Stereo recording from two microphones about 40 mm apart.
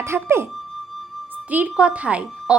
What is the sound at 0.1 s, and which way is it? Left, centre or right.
Speech, right.